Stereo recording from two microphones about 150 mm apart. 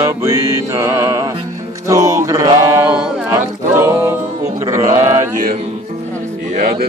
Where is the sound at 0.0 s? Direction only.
20° right (ahead or behind).